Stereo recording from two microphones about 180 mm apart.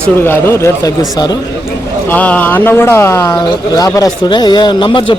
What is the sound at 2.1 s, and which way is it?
A man's voice, 10° left (ahead or behind).